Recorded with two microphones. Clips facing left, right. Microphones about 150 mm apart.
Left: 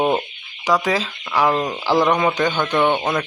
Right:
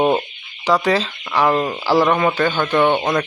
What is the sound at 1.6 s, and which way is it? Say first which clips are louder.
Speech: right 2 dB; 10° right (ahead or behind).